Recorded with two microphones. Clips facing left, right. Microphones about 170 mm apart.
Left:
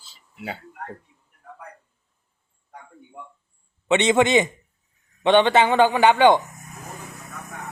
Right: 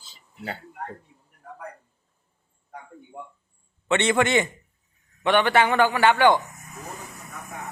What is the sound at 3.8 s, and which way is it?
A man's voice, 20° left (ahead or behind).